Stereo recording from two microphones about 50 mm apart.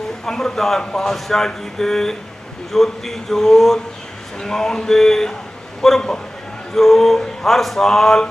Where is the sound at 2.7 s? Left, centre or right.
Centre.